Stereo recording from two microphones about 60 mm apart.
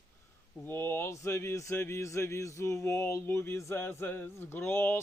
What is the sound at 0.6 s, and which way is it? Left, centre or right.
Speech, left.